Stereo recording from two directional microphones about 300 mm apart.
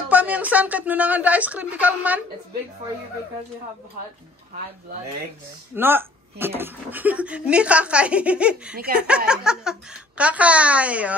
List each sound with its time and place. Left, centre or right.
0.1 s speech: centre
5.8 s speech: centre
8.7 s speech: right
9.0 s speech: centre